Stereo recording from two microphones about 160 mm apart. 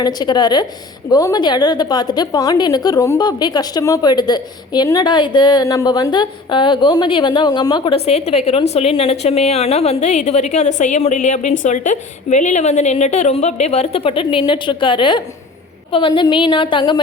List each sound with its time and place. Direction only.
0.0 s a woman's voice: 25° left (ahead or behind)
7.9 s a woman's voice: 40° left (ahead or behind)